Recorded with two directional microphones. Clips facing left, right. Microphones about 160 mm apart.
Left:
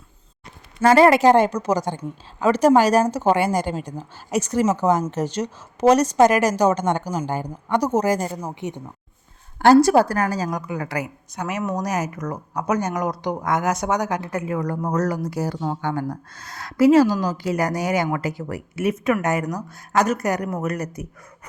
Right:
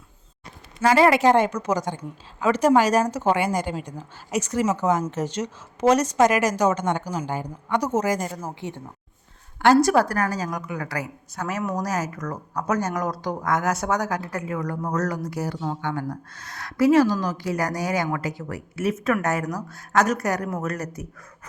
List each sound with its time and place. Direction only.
0.8 s a woman's voice: 45° left (ahead or behind)
8.4 s a woman's voice: 20° left (ahead or behind)
9.6 s a woman's voice: 30° left (ahead or behind)
19.2 s a woman's voice: 15° left (ahead or behind)